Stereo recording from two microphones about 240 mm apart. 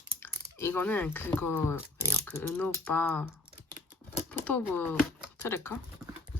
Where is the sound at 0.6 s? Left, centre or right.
Centre.